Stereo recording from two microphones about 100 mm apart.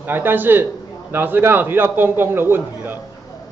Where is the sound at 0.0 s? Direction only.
20° right (ahead or behind).